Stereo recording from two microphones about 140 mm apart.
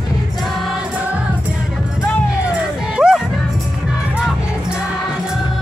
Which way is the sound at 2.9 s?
5° right (ahead or behind).